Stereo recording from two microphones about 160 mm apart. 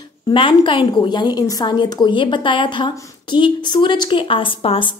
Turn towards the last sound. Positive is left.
turn(degrees=35)  # may be behind; listen again after turning